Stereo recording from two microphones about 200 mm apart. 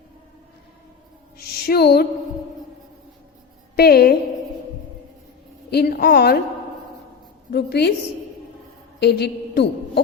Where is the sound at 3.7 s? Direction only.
50° left (ahead or behind).